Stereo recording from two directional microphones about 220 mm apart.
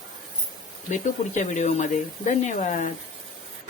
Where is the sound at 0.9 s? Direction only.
35° left (ahead or behind).